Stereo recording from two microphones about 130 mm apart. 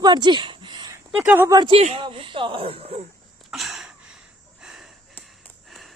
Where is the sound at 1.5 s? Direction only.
35° right (ahead or behind).